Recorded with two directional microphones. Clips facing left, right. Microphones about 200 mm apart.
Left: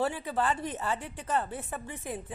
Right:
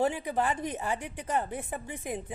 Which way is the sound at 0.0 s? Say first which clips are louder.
Right 2 dB; 15° right (ahead or behind).